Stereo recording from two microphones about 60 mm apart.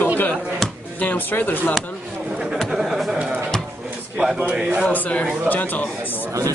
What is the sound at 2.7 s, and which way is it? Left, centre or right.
Speech, centre.